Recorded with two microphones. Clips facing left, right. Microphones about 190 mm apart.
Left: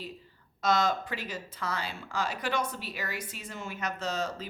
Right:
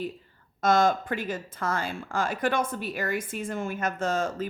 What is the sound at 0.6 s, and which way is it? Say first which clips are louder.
Speech: right 5 dB; 50° right (ahead or behind).